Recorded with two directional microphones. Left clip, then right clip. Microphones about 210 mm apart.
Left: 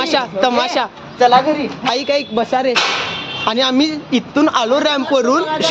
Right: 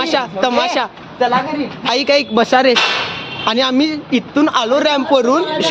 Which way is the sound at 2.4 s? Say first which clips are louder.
Right 6 dB; 30° right (ahead or behind).